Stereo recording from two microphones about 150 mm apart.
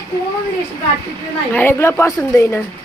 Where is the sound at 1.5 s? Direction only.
15° left (ahead or behind).